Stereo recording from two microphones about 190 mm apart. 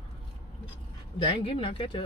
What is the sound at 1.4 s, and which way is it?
Speech, 30° left (ahead or behind).